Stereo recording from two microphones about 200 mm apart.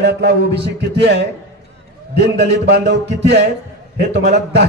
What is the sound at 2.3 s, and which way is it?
A man's voice, 60° right (ahead or behind).